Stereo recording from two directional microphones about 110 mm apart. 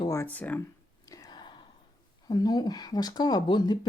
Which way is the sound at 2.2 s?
35° left (ahead or behind).